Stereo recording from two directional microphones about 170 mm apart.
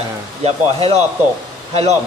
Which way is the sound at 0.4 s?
35° right (ahead or behind).